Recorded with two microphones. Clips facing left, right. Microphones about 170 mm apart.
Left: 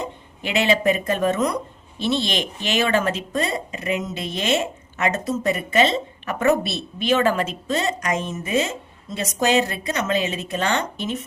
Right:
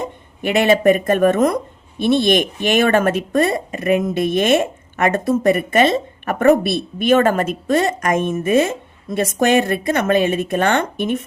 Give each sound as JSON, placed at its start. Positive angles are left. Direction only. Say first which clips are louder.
{"t": 0.0, "sound": "a woman's voice", "louder": "right 6 dB", "side_deg": -50}